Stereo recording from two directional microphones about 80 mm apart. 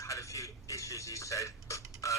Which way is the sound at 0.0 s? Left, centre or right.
Left.